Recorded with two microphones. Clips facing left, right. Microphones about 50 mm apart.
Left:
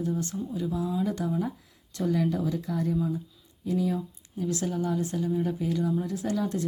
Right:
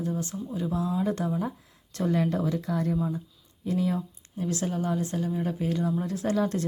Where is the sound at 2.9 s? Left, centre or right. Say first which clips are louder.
Even; right.